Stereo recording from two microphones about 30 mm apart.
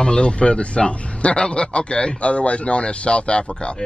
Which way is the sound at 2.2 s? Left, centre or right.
Left.